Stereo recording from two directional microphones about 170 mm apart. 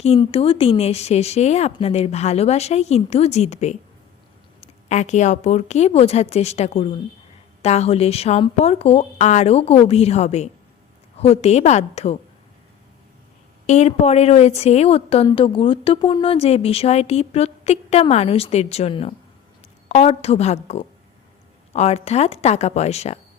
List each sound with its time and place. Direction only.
0.0 s a woman's voice: 35° left (ahead or behind)
13.7 s a woman's voice: 40° left (ahead or behind)